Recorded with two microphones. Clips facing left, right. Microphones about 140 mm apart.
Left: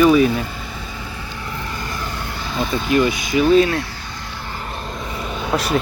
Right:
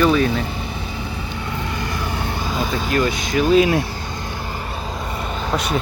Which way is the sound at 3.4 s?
10° right (ahead or behind).